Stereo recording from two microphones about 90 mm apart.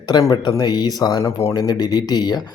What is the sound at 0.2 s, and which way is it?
Speech, 50° left (ahead or behind).